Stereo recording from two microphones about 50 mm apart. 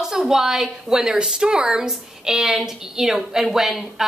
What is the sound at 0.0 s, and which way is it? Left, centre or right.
A woman's voice, centre.